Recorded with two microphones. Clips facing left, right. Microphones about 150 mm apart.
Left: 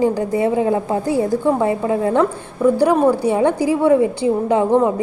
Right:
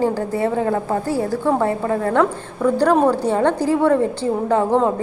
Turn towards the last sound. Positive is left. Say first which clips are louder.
# left 2 dB
turn(degrees=15)  # may be behind; listen again after turning